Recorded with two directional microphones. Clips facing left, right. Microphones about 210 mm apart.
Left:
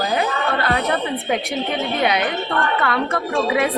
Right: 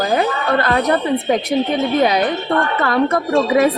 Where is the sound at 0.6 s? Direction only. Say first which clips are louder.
Right 5 dB; 40° right (ahead or behind).